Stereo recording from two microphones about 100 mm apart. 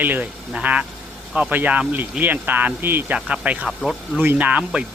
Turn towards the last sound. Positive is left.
turn(degrees=-15)  # may be behind; listen again after turning